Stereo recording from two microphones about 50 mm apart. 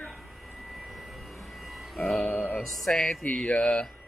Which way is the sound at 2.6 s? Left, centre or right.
Centre.